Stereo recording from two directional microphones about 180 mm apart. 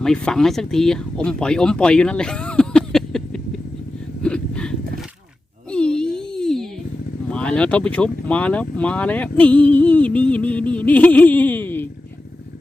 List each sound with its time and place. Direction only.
0.0 s speech: 5° left (ahead or behind)
4.2 s gasp: 5° left (ahead or behind)
5.7 s wail: 5° left (ahead or behind)
7.3 s speech: 5° left (ahead or behind)